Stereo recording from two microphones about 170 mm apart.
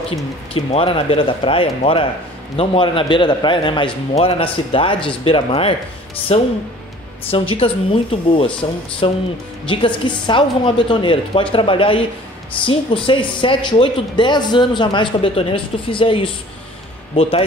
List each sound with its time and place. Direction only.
0.7 s a man's voice: 35° left (ahead or behind)